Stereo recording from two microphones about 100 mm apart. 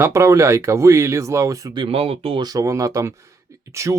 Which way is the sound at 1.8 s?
65° right (ahead or behind).